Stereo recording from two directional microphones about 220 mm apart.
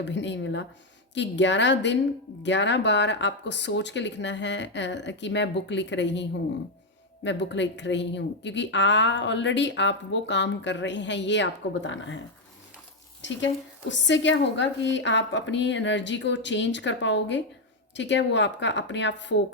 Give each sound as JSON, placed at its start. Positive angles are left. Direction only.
{"t": 0.0, "sound": "speech", "side_deg": 55}
{"t": 7.3, "sound": "speech", "side_deg": 55}
{"t": 13.2, "sound": "a woman's voice", "side_deg": 55}